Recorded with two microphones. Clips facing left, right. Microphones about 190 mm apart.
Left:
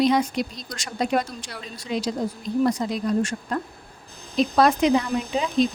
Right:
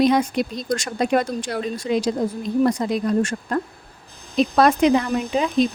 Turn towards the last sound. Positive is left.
turn(degrees=-55)  # may be behind; listen again after turning